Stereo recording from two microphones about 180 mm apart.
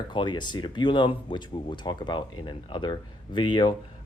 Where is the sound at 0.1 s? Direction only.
25° left (ahead or behind).